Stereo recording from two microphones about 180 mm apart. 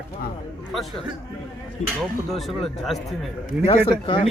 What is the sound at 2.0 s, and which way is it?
Speech, centre (ahead or behind).